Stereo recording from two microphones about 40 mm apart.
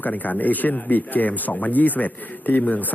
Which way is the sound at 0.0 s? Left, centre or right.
Left.